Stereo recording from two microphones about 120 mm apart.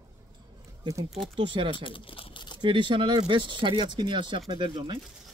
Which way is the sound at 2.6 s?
45° right (ahead or behind).